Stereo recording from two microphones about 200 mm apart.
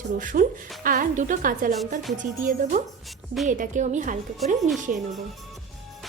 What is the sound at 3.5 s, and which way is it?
Speech, 40° right (ahead or behind).